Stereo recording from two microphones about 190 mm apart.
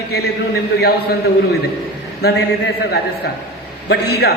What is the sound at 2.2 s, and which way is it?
A man's voice, 60° left (ahead or behind).